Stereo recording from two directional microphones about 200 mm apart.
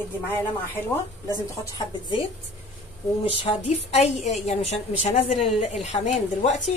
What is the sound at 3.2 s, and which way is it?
A woman's voice, 30° left (ahead or behind).